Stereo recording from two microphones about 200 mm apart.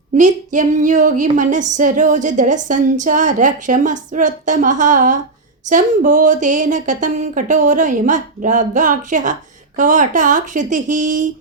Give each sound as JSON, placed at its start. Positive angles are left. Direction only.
{"t": 0.2, "sound": "speech", "side_deg": -40}